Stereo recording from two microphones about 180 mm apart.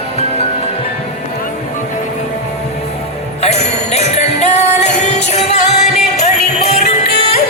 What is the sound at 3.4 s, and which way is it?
Music, 35° left (ahead or behind).